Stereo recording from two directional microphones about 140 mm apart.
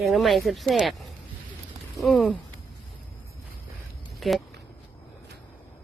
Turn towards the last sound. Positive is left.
turn(degrees=0)  # may be behind; listen again after turning